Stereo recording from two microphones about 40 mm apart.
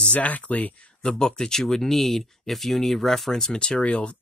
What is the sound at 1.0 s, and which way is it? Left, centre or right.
Speech, centre.